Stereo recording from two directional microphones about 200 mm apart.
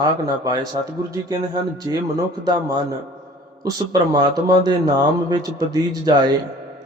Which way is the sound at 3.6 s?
20° right (ahead or behind).